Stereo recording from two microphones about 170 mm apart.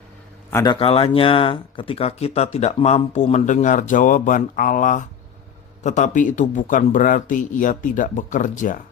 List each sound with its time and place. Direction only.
0.5 s speech: 25° left (ahead or behind); by 8.8 s 50° left (ahead or behind)